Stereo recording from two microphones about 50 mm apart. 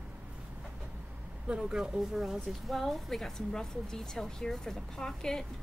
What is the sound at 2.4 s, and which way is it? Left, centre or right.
A woman's voice, centre.